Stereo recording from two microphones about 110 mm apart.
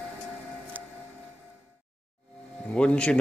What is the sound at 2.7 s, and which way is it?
Speech, 10° left (ahead or behind).